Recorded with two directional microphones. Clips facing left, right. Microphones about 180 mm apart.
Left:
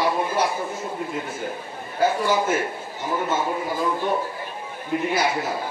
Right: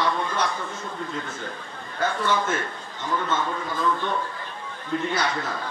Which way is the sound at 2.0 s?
15° left (ahead or behind).